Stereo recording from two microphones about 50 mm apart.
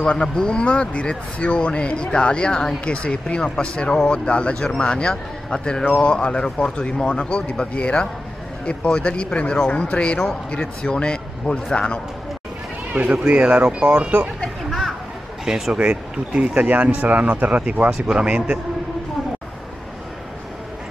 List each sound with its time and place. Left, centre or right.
0.0 s speech: centre
5.9 s speech: left
12.9 s speech: right
15.4 s speech: centre
15.8 s speech: right